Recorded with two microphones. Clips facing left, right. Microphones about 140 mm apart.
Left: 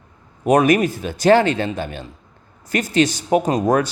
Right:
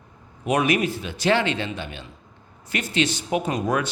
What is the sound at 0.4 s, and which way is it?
A man's voice, 45° left (ahead or behind).